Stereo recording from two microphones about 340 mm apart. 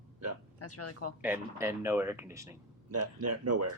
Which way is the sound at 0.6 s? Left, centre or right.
Left.